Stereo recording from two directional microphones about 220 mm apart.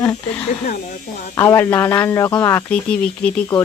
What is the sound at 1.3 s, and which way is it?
Speech, 10° left (ahead or behind).